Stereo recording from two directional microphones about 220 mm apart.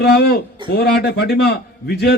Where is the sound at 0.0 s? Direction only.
50° left (ahead or behind).